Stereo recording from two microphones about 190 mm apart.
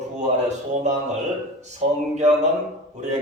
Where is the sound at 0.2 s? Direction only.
35° right (ahead or behind).